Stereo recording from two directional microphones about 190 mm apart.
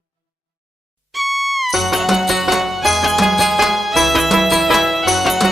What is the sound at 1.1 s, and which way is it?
Music, centre (ahead or behind).